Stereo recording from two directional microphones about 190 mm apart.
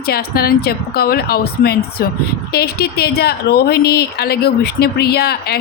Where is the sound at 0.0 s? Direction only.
55° left (ahead or behind).